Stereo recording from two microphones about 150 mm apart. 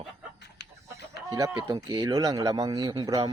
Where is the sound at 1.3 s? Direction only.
20° right (ahead or behind).